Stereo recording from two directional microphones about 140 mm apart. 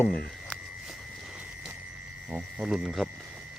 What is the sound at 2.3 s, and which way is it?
Speech, 10° right (ahead or behind).